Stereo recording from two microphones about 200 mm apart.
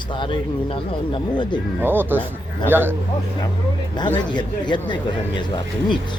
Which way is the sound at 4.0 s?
20° left (ahead or behind).